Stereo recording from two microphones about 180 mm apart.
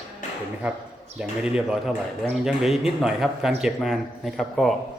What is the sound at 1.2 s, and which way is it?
A man's voice, 5° right (ahead or behind).